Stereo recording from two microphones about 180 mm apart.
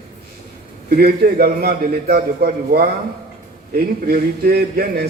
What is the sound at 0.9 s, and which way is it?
A man's voice, 60° right (ahead or behind).